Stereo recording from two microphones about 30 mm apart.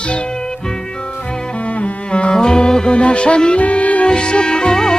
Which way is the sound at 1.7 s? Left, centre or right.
Left.